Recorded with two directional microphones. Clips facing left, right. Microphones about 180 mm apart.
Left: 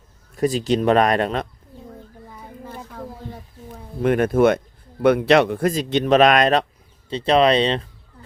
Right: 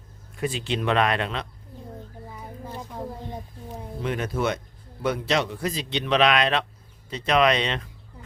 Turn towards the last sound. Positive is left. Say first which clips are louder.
# left 5 dB
turn(degrees=30)  # may be behind; listen again after turning